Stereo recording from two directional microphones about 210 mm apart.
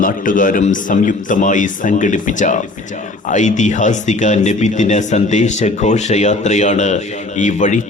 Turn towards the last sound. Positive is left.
turn(degrees=35)  # may be behind; listen again after turning